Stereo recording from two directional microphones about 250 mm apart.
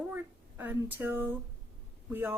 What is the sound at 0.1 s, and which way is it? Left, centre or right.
A woman's voice, centre.